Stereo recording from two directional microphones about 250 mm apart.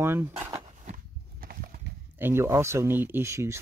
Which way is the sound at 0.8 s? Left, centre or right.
Right.